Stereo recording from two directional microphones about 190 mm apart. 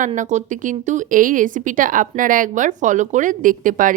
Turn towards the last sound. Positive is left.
turn(degrees=-45)  # may be behind; listen again after turning